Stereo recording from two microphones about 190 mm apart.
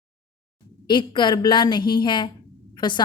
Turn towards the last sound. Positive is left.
turn(degrees=25)  # may be behind; listen again after turning